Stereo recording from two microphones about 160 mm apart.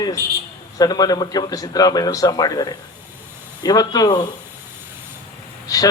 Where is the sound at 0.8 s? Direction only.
25° left (ahead or behind).